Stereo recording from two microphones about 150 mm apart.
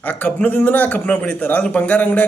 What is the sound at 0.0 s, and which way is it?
A man's voice, 10° left (ahead or behind).